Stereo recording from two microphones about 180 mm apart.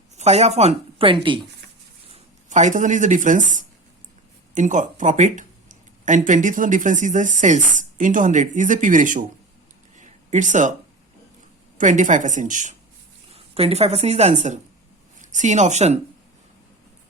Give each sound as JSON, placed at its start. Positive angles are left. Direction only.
{"t": 0.2, "sound": "speech", "side_deg": -40}
{"t": 2.1, "sound": "speech", "side_deg": -40}
{"t": 4.5, "sound": "speech", "side_deg": -45}
{"t": 10.0, "sound": "a sound", "side_deg": -45}
{"t": 11.8, "sound": "speech", "side_deg": -45}
{"t": 13.3, "sound": "a woman's voice", "side_deg": -35}